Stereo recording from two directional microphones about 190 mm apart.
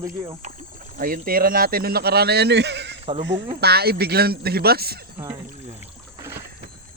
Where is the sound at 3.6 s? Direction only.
55° right (ahead or behind).